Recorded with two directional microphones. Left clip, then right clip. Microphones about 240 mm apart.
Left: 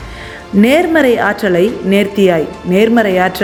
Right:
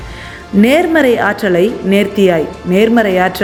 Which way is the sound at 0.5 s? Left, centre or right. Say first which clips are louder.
Even; centre.